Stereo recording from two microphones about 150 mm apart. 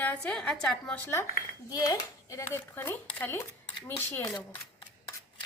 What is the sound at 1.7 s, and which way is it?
Speech, 25° left (ahead or behind).